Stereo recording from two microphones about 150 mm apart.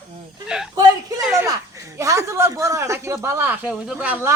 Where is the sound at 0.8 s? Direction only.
25° right (ahead or behind).